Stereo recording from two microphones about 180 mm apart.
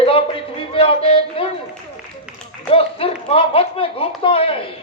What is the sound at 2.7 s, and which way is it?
A man's voice, 30° left (ahead or behind).